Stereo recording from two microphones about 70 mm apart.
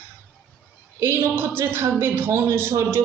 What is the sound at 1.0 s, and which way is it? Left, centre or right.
A man's voice, right.